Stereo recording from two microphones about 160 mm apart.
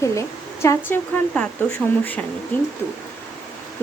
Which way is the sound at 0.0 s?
20° left (ahead or behind).